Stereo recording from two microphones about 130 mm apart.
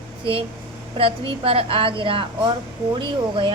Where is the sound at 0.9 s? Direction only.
45° right (ahead or behind).